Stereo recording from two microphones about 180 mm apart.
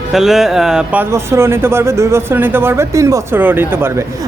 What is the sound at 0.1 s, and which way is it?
Speech, centre (ahead or behind).